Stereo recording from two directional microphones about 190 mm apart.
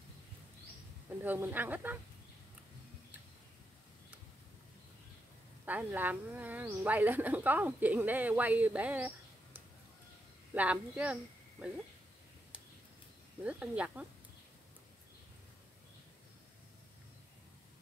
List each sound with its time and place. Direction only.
1.2 s speech: 10° right (ahead or behind)
5.7 s speech: 10° right (ahead or behind)
13.4 s speech: 5° right (ahead or behind)